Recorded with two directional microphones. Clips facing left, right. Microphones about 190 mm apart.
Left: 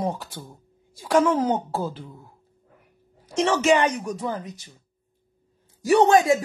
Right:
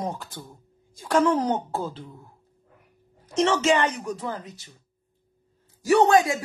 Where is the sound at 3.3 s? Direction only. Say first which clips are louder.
Left 1 dB; 10° left (ahead or behind).